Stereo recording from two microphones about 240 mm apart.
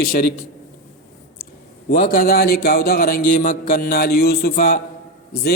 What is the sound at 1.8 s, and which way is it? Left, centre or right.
A man's voice, left.